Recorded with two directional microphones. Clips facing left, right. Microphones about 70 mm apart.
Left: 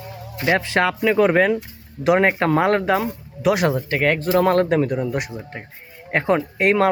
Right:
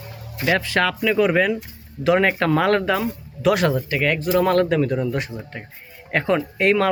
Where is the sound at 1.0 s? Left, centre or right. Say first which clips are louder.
Left 3 dB; left.